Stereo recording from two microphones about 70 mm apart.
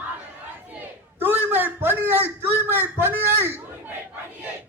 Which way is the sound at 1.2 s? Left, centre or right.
Right.